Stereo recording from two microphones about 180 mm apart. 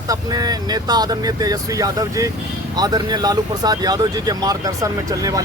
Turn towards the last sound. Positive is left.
turn(degrees=-20)  # may be behind; listen again after turning